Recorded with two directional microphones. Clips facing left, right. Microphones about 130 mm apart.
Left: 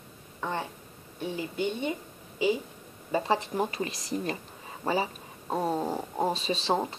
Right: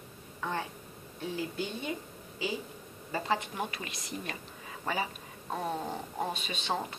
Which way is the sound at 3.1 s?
30° left (ahead or behind).